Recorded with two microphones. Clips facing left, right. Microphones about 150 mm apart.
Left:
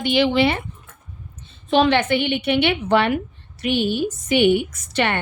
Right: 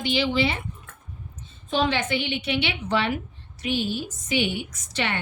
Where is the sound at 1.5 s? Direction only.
75° left (ahead or behind).